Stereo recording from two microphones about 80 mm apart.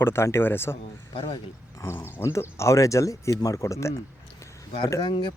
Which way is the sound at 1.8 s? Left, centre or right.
Left.